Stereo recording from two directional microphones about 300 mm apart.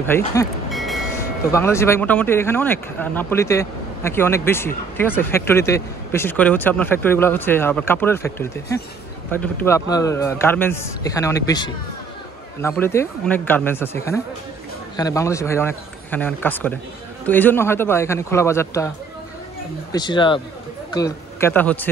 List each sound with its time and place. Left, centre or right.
0.0 s speech: centre
0.7 s train: centre
1.5 s speech: centre
15.0 s speech: centre
19.9 s speech: centre